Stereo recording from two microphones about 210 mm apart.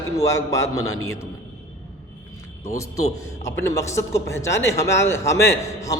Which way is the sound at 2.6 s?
15° left (ahead or behind).